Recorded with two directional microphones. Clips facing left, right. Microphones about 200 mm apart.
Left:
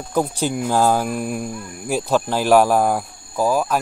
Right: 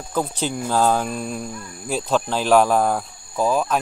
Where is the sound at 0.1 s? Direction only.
10° left (ahead or behind).